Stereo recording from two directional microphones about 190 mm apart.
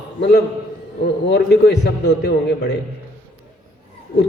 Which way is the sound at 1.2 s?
65° left (ahead or behind).